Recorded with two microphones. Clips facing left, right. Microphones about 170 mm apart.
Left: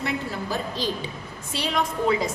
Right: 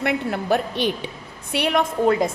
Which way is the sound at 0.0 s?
60° right (ahead or behind).